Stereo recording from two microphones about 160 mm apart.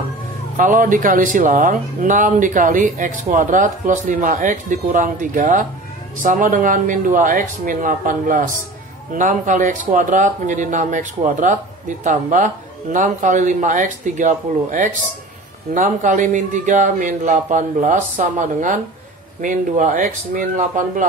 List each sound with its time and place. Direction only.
0.6 s a man's voice: 55° right (ahead or behind)